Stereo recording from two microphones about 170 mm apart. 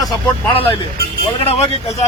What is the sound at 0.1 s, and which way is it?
Speech, 25° left (ahead or behind).